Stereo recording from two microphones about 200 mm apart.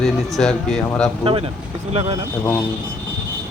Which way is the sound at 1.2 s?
30° right (ahead or behind).